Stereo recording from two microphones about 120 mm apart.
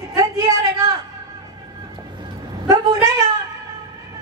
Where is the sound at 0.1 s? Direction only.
30° right (ahead or behind).